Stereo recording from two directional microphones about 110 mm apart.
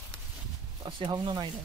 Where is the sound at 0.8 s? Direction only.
50° right (ahead or behind).